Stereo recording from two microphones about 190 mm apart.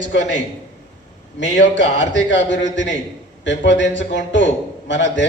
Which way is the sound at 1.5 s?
70° left (ahead or behind).